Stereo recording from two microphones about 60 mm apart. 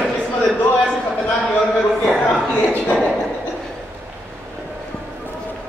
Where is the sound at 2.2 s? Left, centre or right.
Centre.